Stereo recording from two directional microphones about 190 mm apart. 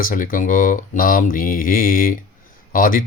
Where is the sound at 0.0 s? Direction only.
45° left (ahead or behind).